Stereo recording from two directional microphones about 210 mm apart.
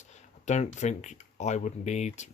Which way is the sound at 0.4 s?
35° left (ahead or behind).